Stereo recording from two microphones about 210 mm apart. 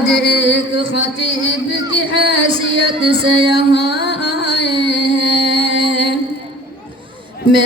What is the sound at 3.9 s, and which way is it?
Music, 50° left (ahead or behind).